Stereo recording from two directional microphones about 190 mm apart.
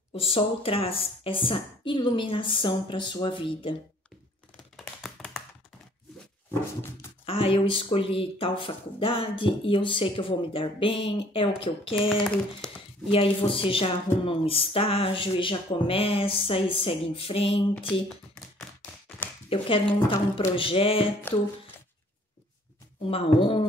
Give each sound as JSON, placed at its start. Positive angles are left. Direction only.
{"t": 0.1, "sound": "speech", "side_deg": 30}
{"t": 4.7, "sound": "tap", "side_deg": 0}
{"t": 7.2, "sound": "speech", "side_deg": 30}
{"t": 19.5, "sound": "speech", "side_deg": 30}
{"t": 23.0, "sound": "speech", "side_deg": 30}